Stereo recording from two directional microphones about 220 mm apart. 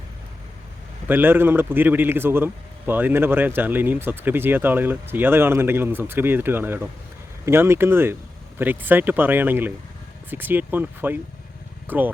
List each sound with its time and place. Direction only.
1.0 s a man's voice: 10° right (ahead or behind)